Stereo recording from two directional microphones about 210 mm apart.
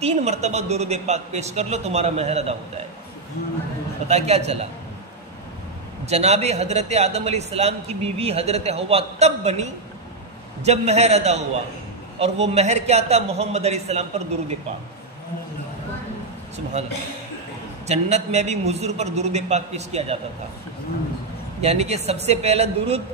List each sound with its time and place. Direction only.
0.0 s a man's voice: 30° right (ahead or behind)
4.1 s a man's voice: 30° right (ahead or behind)
6.0 s a man's voice: 30° right (ahead or behind)
17.8 s a man's voice: 30° right (ahead or behind)
21.5 s a man's voice: 30° right (ahead or behind)